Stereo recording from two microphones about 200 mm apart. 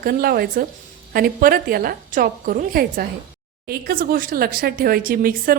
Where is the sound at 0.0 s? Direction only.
45° right (ahead or behind).